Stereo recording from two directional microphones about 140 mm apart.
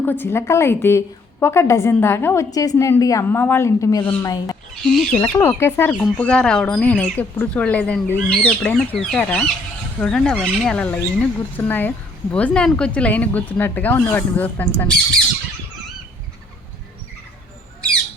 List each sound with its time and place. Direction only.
0.0 s a woman's voice: 15° left (ahead or behind)
5.1 s speech: 15° left (ahead or behind)